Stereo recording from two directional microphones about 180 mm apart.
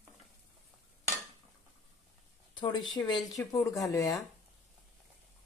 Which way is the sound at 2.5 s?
25° left (ahead or behind).